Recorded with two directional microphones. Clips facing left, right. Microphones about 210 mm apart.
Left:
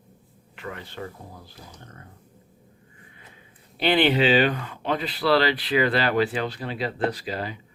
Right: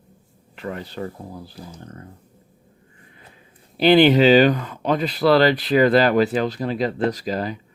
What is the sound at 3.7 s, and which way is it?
Speech, 40° right (ahead or behind).